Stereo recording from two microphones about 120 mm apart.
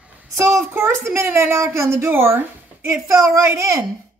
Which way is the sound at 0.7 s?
20° right (ahead or behind).